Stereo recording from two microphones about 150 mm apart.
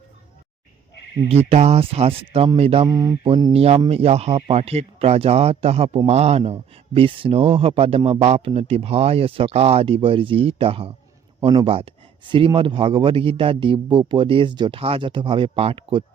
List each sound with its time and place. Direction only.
1.5 s speech: 45° right (ahead or behind)
2.8 s mantra: 25° right (ahead or behind)
3.2 s speech: 35° right (ahead or behind)